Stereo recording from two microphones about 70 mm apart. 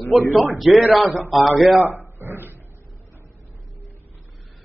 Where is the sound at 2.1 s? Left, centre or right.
Right.